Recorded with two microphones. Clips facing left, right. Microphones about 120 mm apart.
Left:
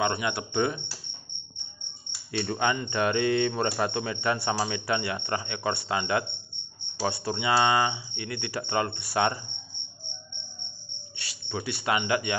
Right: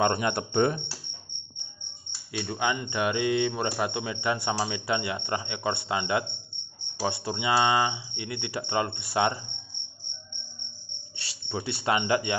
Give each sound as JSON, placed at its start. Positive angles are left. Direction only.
{"t": 0.0, "sound": "speech", "side_deg": -40}
{"t": 2.3, "sound": "speech", "side_deg": -10}
{"t": 11.1, "sound": "speech", "side_deg": -30}